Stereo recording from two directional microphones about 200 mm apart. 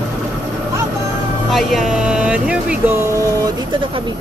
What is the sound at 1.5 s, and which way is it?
Speech, centre (ahead or behind).